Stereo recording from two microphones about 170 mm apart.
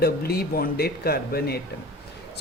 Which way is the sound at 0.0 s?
65° left (ahead or behind).